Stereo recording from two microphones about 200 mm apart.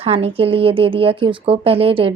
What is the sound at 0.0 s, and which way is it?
Speech, 30° right (ahead or behind).